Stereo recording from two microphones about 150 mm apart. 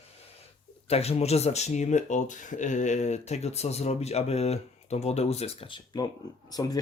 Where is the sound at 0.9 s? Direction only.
45° left (ahead or behind).